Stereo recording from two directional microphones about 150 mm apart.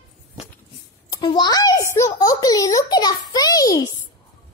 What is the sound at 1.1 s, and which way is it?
A child's voice, 30° left (ahead or behind).